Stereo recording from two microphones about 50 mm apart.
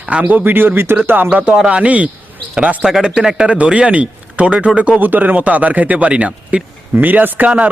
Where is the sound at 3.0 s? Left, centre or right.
Centre.